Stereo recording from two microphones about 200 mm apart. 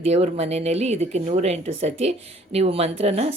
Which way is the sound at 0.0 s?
30° right (ahead or behind).